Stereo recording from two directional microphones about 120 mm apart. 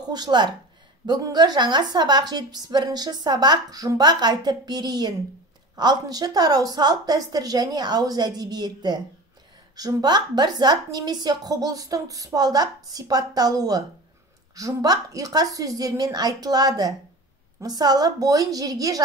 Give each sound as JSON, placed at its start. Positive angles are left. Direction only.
{"t": 0.1, "sound": "a woman's voice", "side_deg": -35}